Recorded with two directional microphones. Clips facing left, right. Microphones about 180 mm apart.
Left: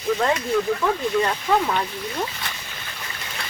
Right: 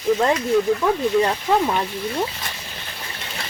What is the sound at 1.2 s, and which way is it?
Speech, 25° right (ahead or behind).